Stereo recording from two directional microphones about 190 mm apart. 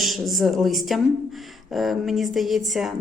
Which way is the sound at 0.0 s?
Centre (ahead or behind).